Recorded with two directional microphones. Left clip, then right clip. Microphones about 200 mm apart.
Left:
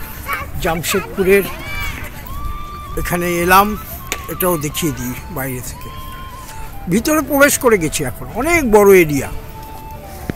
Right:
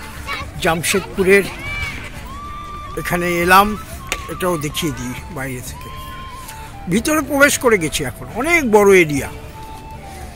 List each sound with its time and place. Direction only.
0.6 s speech: 15° right (ahead or behind)
1.2 s speech: 5° right (ahead or behind)
2.9 s speech: centre (ahead or behind)
6.9 s speech: 10° left (ahead or behind)